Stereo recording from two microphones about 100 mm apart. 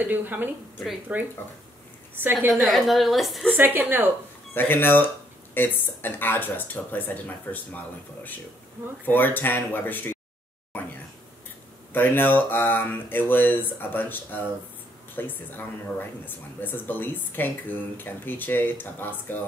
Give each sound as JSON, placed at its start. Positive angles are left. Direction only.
{"t": 0.0, "sound": "a woman's voice", "side_deg": -15}
{"t": 2.5, "sound": "a woman's voice", "side_deg": 0}
{"t": 3.5, "sound": "a woman's voice", "side_deg": -20}
{"t": 4.6, "sound": "speech", "side_deg": 20}
{"t": 11.9, "sound": "speech", "side_deg": 20}